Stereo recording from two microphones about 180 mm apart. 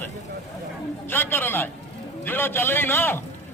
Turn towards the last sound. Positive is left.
turn(degrees=10)  # may be behind; listen again after turning